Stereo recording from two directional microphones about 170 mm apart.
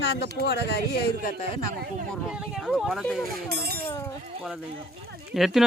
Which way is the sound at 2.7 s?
5° right (ahead or behind).